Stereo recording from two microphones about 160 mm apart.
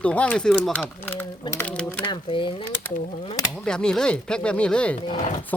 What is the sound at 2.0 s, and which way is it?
Speech, 30° left (ahead or behind).